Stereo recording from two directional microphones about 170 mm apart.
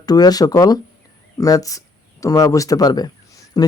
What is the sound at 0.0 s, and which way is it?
Speech, 25° left (ahead or behind).